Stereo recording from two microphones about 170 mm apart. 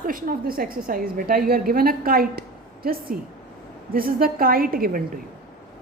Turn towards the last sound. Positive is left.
turn(degrees=-60)  # may be behind; listen again after turning